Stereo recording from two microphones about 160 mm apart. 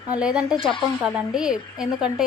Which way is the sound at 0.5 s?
35° left (ahead or behind).